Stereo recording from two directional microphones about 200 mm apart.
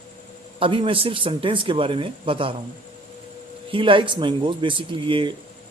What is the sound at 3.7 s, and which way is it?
Speech, 25° right (ahead or behind).